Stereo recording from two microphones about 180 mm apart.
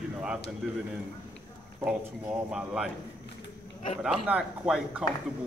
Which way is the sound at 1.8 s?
5° right (ahead or behind).